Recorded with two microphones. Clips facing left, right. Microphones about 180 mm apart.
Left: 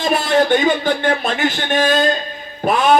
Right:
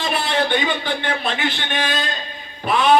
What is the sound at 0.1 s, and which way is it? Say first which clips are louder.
A man's voice: left 7 dB; 45° left (ahead or behind).